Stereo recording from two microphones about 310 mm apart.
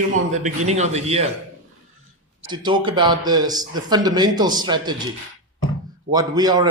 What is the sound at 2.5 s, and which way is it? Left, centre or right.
Speech, centre.